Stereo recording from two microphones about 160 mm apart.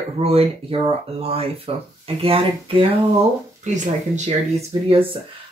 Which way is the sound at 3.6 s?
50° right (ahead or behind).